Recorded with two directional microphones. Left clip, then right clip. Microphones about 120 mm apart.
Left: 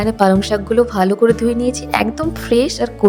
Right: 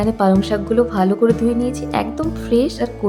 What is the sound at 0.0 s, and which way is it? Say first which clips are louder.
Speech: left 3 dB; 70° left (ahead or behind).